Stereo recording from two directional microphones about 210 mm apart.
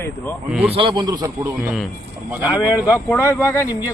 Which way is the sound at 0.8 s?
20° right (ahead or behind).